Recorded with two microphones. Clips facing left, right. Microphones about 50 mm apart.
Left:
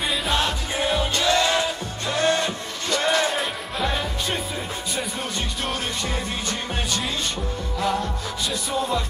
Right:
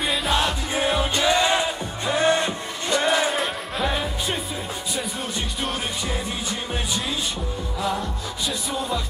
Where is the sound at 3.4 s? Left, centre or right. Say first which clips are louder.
Right 1 dB; centre.